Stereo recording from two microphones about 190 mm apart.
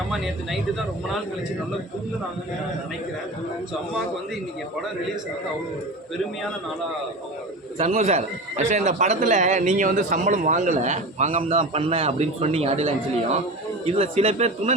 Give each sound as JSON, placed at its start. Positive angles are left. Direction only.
{"t": 7.8, "sound": "speech", "side_deg": -35}